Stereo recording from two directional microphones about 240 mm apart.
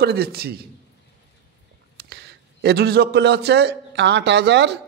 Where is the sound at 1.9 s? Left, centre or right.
Right.